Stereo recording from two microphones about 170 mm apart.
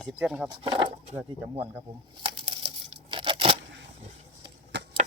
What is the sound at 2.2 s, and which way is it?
Tearing, 30° right (ahead or behind).